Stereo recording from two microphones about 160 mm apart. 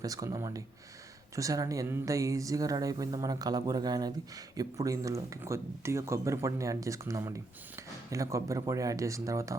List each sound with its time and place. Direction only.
0.0 s speech: 20° right (ahead or behind)